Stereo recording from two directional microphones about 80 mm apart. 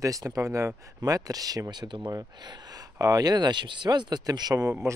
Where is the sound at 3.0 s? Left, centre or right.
Right.